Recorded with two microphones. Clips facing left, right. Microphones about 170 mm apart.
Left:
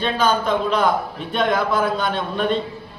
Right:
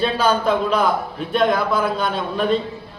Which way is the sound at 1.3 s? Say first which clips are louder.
Right 1 dB; centre (ahead or behind).